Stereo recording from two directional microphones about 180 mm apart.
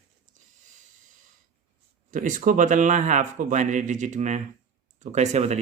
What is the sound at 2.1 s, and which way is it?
Speech, 45° right (ahead or behind).